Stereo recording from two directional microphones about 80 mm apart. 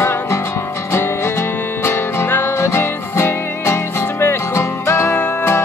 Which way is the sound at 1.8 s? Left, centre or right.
Left.